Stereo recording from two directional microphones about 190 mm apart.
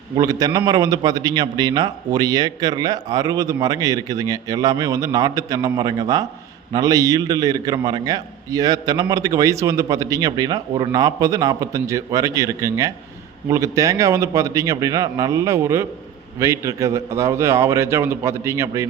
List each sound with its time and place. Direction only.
0.2 s a man's voice: 20° right (ahead or behind)